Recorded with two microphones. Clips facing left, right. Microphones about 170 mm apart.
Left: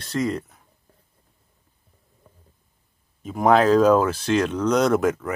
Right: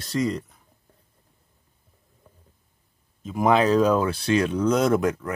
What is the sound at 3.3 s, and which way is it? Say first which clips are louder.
Speech: left 3 dB; centre (ahead or behind).